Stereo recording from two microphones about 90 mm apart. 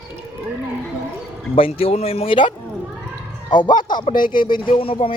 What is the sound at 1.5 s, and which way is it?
A man's voice, 90° left.